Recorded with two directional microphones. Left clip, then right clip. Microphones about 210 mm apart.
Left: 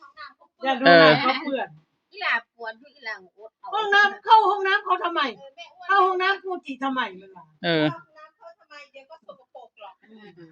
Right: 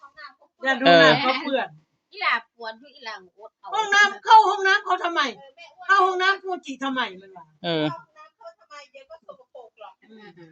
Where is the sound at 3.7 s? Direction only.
30° right (ahead or behind).